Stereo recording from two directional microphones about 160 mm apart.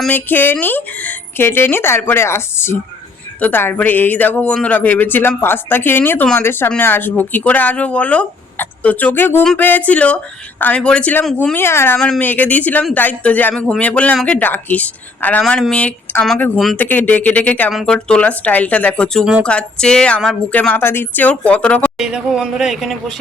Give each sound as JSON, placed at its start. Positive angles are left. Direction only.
{"t": 0.0, "sound": "speech", "side_deg": 10}
{"t": 11.5, "sound": "speech", "side_deg": 15}
{"t": 11.9, "sound": "speech", "side_deg": 5}
{"t": 21.9, "sound": "speech", "side_deg": -5}